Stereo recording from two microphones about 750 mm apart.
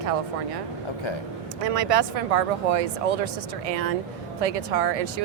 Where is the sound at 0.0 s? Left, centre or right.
Right.